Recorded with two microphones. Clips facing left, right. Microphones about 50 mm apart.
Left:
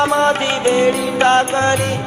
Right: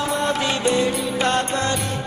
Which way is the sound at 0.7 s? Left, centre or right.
Left.